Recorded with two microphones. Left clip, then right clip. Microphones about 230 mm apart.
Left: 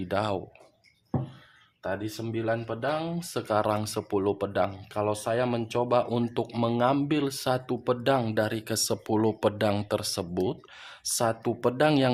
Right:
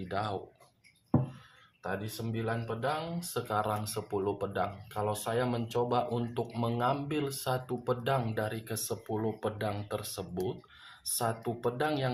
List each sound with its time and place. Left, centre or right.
0.1 s speech: left
1.8 s speech: left